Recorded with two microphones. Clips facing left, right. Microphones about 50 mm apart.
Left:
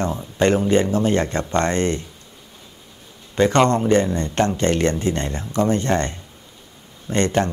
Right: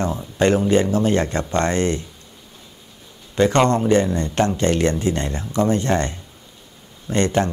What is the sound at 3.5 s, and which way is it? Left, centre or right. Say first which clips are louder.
Speech: even; right.